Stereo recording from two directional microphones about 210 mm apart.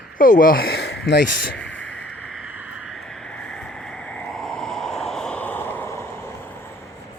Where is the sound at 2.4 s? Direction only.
10° right (ahead or behind); by 6.7 s 10° left (ahead or behind).